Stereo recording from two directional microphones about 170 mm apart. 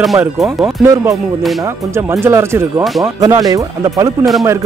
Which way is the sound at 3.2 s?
25° right (ahead or behind).